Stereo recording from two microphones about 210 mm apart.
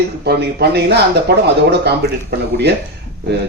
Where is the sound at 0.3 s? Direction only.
50° right (ahead or behind).